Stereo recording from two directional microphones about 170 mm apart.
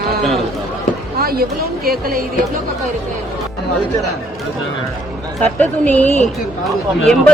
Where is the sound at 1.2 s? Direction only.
60° right (ahead or behind).